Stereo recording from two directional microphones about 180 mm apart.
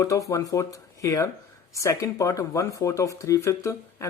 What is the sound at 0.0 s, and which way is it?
Speech, 15° left (ahead or behind).